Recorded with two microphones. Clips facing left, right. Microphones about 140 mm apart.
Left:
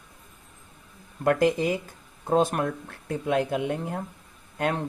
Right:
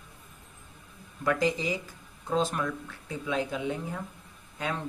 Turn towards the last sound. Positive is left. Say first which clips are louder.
# left 6 dB
turn(degrees=55)  # may be behind; listen again after turning